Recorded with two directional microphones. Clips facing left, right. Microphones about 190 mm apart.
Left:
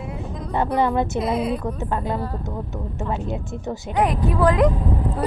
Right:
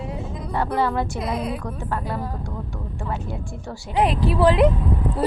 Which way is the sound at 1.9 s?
20° left (ahead or behind).